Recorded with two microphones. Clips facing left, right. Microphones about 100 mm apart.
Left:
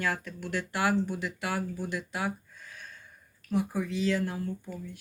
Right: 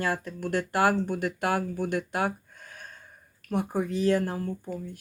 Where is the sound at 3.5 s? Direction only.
50° right (ahead or behind).